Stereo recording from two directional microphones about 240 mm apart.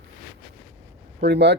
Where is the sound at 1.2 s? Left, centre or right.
Right.